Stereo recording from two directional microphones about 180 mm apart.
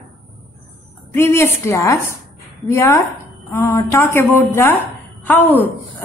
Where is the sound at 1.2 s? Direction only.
15° left (ahead or behind).